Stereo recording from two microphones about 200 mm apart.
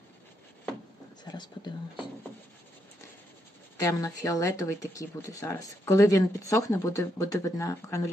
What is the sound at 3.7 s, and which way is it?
Speech, 15° left (ahead or behind).